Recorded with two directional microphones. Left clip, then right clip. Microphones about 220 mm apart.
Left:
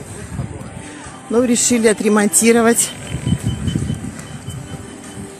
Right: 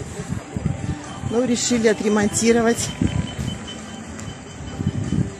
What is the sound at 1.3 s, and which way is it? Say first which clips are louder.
Speech: left 5 dB; 30° left (ahead or behind).